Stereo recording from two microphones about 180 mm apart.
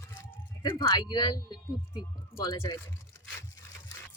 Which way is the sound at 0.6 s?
25° left (ahead or behind).